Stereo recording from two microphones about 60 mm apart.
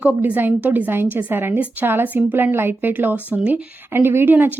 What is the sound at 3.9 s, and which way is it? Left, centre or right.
Speech, right.